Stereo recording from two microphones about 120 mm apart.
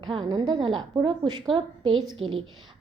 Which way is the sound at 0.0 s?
40° right (ahead or behind).